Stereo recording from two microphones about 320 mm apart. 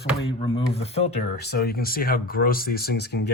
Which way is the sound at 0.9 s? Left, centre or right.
Left.